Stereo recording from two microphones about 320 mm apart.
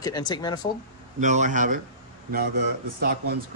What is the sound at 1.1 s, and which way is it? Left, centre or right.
Speech, right.